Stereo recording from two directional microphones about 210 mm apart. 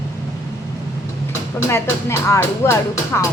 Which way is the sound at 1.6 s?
15° left (ahead or behind).